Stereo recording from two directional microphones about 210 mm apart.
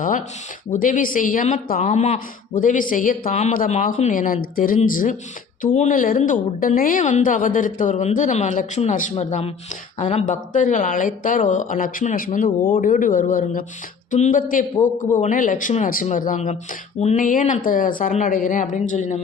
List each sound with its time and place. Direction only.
0.0 s a woman's voice: 40° left (ahead or behind)